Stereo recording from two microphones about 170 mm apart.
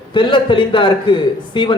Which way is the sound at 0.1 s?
30° left (ahead or behind).